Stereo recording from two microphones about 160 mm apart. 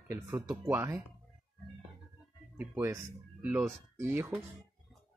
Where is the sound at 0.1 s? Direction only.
15° right (ahead or behind).